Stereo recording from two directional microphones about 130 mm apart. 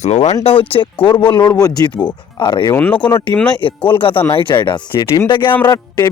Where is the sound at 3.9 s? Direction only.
40° left (ahead or behind).